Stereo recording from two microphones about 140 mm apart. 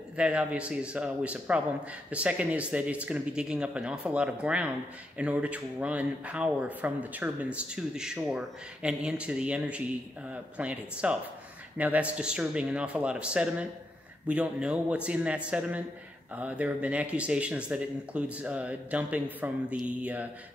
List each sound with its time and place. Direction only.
0.2 s speech: 10° right (ahead or behind)